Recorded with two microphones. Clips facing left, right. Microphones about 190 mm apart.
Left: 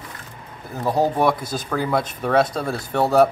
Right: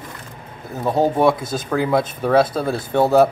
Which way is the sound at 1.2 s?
25° right (ahead or behind).